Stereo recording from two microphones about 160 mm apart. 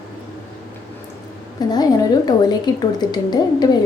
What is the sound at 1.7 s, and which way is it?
A woman's voice, 25° left (ahead or behind).